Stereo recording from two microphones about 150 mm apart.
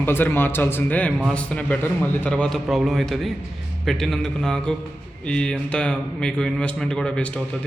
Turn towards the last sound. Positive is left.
turn(degrees=5)  # may be behind; listen again after turning